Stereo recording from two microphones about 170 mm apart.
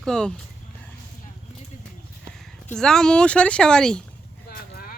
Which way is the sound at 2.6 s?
5° left (ahead or behind).